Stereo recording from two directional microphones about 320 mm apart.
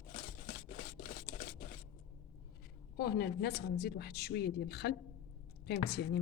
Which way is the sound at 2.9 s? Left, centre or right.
Left.